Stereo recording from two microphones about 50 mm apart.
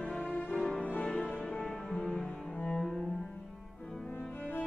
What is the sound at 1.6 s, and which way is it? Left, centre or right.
Music, centre.